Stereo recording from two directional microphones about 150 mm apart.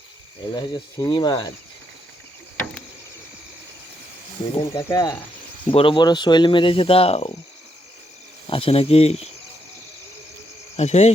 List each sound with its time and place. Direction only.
0.5 s speech: 30° left (ahead or behind)
4.6 s speech: 20° left (ahead or behind)
5.7 s speech: 35° left (ahead or behind)
8.4 s speech: 35° left (ahead or behind)
10.8 s speech: 45° left (ahead or behind)